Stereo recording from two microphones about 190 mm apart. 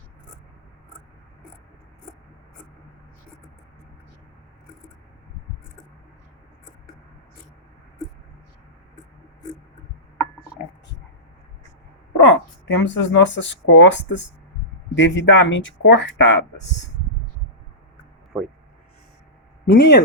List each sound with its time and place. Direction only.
12.2 s speech: 75° left (ahead or behind)
18.3 s speech: 5° right (ahead or behind)
19.6 s speech: 55° left (ahead or behind)